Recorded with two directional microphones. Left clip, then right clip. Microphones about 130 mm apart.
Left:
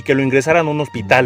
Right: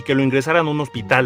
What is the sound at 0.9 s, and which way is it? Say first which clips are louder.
Speech: left 4 dB; 30° left (ahead or behind).